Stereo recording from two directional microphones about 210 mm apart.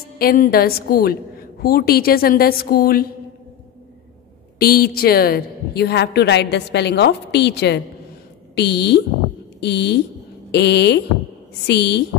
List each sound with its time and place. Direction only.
0.2 s a woman's voice: 45° left (ahead or behind)
4.6 s a woman's voice: 45° left (ahead or behind)